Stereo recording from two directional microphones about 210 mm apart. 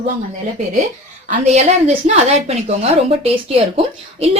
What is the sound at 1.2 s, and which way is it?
Speech, 30° right (ahead or behind).